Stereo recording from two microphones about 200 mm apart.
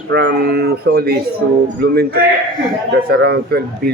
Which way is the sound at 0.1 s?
55° right (ahead or behind).